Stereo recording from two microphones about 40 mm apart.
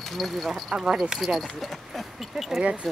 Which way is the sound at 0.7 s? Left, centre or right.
Right.